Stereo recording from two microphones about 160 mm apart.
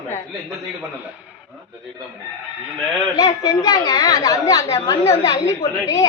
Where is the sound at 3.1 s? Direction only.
20° left (ahead or behind).